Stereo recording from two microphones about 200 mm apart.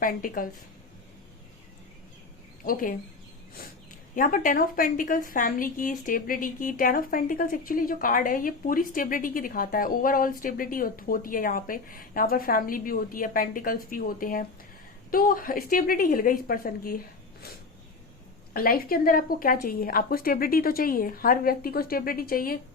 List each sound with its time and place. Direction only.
0.0 s a woman's voice: 45° left (ahead or behind)
2.6 s a woman's voice: 45° left (ahead or behind)
4.1 s a woman's voice: 40° left (ahead or behind)
18.5 s a woman's voice: 45° left (ahead or behind)